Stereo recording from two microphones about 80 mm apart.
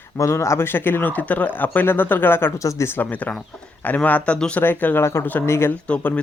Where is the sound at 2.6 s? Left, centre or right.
Left; by 4.6 s centre.